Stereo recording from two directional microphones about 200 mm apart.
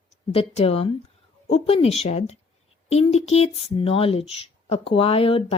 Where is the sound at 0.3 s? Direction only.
30° left (ahead or behind).